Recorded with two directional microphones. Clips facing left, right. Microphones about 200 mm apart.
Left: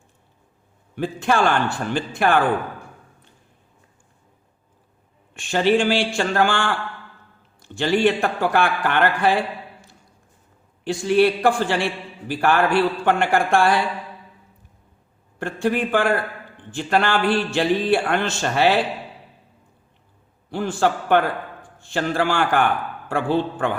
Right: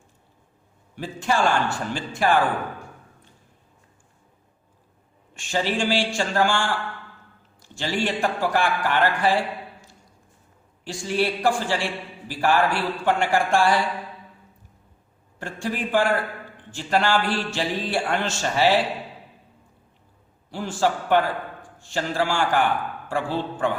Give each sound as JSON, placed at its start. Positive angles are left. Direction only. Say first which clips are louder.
{"t": 0.9, "sound": "speech", "louder": "left 4 dB", "side_deg": 60}
{"t": 5.3, "sound": "speech", "louder": "left 7 dB", "side_deg": 60}
{"t": 7.8, "sound": "speech", "louder": "left 6 dB", "side_deg": 60}
{"t": 10.8, "sound": "speech", "louder": "left 7 dB", "side_deg": 60}
{"t": 15.4, "sound": "speech", "louder": "left 7 dB", "side_deg": 60}
{"t": 20.5, "sound": "speech", "louder": "left 3 dB", "side_deg": 60}